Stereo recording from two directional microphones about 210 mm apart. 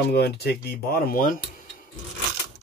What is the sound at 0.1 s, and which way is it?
Speech, 50° left (ahead or behind).